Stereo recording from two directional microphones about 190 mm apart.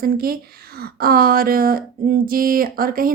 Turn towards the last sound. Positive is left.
turn(degrees=-50)  # may be behind; listen again after turning